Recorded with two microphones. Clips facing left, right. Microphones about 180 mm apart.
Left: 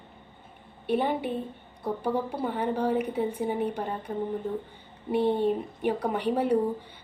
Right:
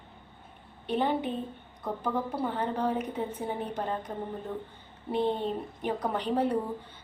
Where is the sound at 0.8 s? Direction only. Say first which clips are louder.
Left 2 dB; 10° left (ahead or behind).